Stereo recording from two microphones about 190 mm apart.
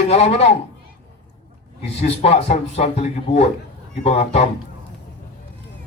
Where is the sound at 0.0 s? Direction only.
35° left (ahead or behind).